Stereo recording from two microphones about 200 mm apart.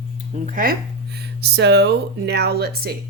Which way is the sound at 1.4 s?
55° right (ahead or behind).